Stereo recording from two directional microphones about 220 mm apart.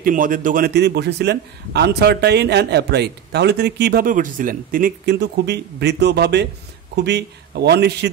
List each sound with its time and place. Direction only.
0.0 s a man's voice: 40° right (ahead or behind)